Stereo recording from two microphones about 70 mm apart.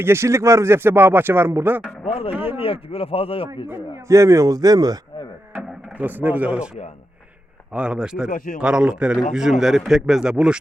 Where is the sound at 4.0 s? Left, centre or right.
Right.